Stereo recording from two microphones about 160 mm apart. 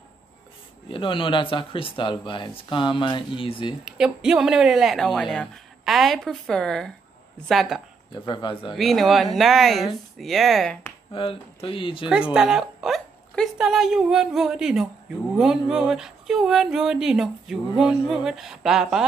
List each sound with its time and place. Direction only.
0.8 s speech: 30° left (ahead or behind)
3.8 s speech: 5° right (ahead or behind)
8.1 s speech: 30° left (ahead or behind)
8.7 s speech: centre (ahead or behind)
11.1 s speech: 35° left (ahead or behind)
12.4 s speech: 5° right (ahead or behind)